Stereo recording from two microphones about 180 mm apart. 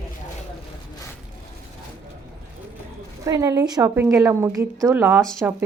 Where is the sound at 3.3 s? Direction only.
20° right (ahead or behind).